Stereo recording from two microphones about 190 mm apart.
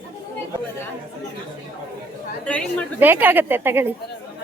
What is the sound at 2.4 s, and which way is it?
Speech, 5° left (ahead or behind).